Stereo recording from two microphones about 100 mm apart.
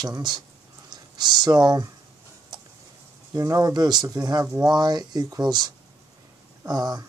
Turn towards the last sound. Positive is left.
turn(degrees=-40)  # may be behind; listen again after turning